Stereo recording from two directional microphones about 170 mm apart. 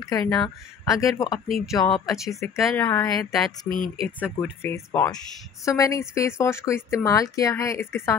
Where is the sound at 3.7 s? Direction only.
25° right (ahead or behind).